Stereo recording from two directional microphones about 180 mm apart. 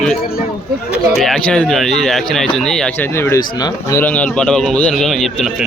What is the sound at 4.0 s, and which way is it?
Speech, 10° left (ahead or behind).